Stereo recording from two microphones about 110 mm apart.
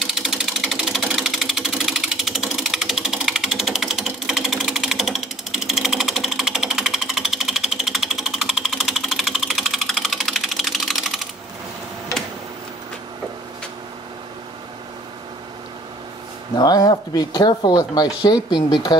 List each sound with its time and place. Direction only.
0.0 s sewing machine: 5° right (ahead or behind)
16.5 s speech: 35° left (ahead or behind)